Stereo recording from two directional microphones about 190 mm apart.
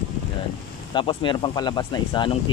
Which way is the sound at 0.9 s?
25° left (ahead or behind).